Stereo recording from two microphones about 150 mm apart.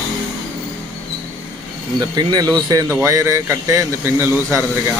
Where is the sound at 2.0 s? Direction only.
30° right (ahead or behind).